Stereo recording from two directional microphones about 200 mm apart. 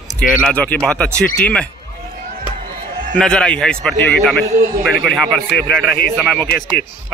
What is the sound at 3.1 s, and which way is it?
A man's voice, 5° left (ahead or behind).